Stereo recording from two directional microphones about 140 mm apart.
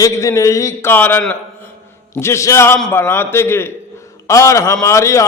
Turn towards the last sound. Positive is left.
turn(degrees=20)  # may be behind; listen again after turning